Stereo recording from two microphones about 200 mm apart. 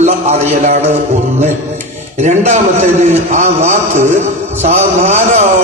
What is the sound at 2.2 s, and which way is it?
A man's voice, 35° right (ahead or behind).